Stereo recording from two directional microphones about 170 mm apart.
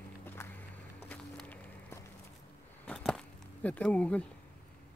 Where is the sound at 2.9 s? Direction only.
5° left (ahead or behind).